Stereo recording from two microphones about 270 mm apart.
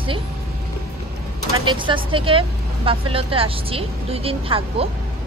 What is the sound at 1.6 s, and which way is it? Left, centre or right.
Speech, centre.